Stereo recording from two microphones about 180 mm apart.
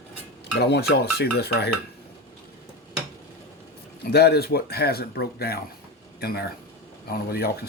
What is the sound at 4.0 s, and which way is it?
Speech, 60° left (ahead or behind).